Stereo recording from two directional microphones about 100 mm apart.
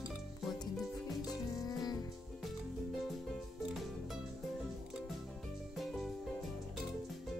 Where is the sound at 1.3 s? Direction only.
35° left (ahead or behind).